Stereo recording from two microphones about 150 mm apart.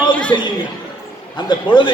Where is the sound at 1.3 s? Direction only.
30° left (ahead or behind).